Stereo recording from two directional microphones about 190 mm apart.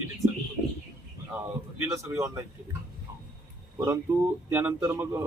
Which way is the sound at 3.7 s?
15° right (ahead or behind).